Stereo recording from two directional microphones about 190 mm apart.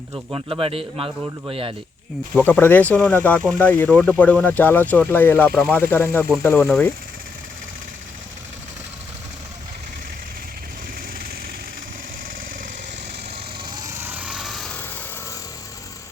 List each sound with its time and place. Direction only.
0.3 s a man's voice: 25° right (ahead or behind)
2.3 s speech: 10° left (ahead or behind)
14.0 s vehicle: 10° right (ahead or behind)